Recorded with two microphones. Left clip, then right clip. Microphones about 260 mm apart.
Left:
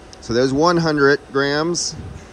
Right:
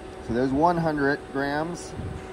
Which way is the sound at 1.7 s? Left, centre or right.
Left.